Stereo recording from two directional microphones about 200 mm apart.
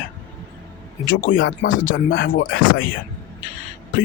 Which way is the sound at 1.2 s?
45° left (ahead or behind).